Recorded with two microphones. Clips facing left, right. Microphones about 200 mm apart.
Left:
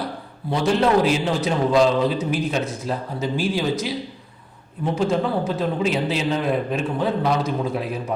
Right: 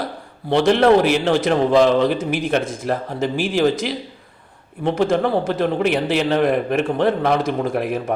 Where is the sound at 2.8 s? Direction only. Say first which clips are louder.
Right 4 dB; 70° right (ahead or behind).